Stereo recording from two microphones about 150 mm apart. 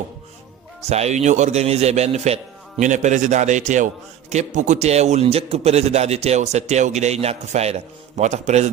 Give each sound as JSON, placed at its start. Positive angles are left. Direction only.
{"t": 0.9, "sound": "a man's voice", "side_deg": -45}